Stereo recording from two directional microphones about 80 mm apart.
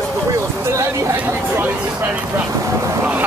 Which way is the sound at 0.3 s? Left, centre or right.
Right.